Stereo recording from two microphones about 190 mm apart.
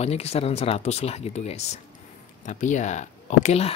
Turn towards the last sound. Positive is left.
turn(degrees=35)  # may be behind; listen again after turning